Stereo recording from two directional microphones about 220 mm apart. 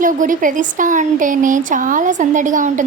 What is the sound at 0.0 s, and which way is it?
Speech, 35° right (ahead or behind).